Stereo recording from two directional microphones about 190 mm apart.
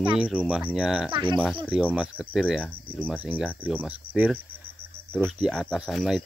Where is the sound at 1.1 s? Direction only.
25° right (ahead or behind).